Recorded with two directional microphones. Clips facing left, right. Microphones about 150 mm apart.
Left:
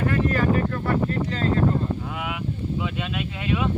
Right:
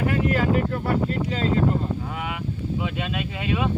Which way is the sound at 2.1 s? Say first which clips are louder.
Even; centre (ahead or behind).